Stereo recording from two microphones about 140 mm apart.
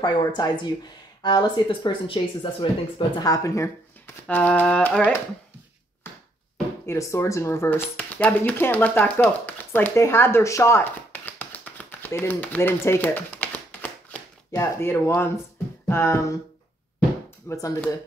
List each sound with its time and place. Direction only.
0.0 s speech: 30° left (ahead or behind)
3.2 s speech: 25° left (ahead or behind)
4.3 s speech: 10° left (ahead or behind)
6.0 s a sound: 15° left (ahead or behind)
6.9 s speech: 20° left (ahead or behind)
17.5 s speech: 25° left (ahead or behind)